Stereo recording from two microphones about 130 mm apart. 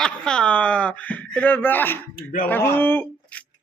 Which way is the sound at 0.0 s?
5° left (ahead or behind).